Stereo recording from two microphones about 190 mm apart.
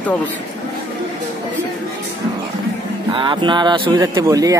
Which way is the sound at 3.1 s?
25° right (ahead or behind).